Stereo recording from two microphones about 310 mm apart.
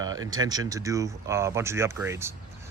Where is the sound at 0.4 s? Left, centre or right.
Centre.